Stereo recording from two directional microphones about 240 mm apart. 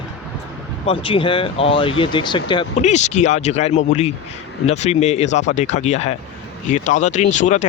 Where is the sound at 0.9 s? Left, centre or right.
Left.